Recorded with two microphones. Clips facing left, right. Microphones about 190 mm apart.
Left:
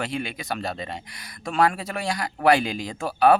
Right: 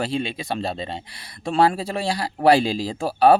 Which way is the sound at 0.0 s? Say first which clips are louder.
Right 4 dB; 30° right (ahead or behind).